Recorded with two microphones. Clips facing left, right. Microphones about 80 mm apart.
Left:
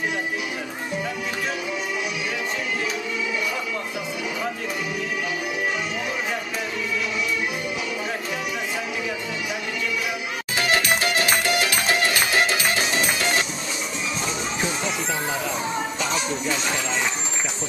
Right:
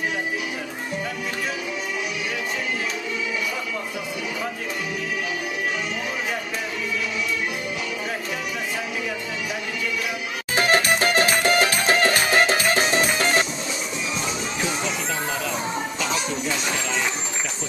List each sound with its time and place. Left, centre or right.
10.5 s music: right
16.0 s music: centre